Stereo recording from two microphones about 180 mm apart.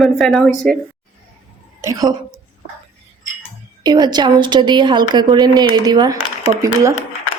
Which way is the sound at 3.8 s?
25° right (ahead or behind).